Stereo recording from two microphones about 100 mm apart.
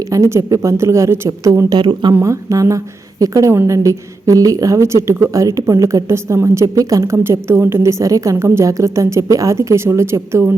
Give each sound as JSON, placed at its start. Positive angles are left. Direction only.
{"t": 0.1, "sound": "a woman's voice", "side_deg": -30}
{"t": 1.7, "sound": "speech", "side_deg": -45}
{"t": 2.2, "sound": "a woman's voice", "side_deg": -35}